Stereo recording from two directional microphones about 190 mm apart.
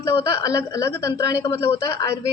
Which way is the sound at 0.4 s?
15° left (ahead or behind).